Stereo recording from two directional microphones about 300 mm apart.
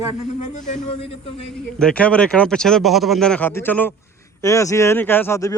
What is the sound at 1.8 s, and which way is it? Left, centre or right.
Speech, centre.